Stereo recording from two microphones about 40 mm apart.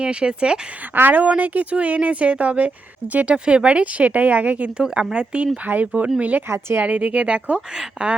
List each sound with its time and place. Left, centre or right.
0.0 s speech: right
0.9 s speech: right
1.7 s speech: right
3.3 s speech: right
5.1 s speech: right
5.6 s speech: right
6.5 s speech: right
6.8 s speech: right